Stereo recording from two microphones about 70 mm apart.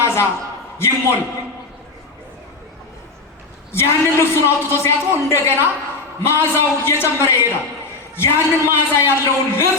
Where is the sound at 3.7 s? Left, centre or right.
Left.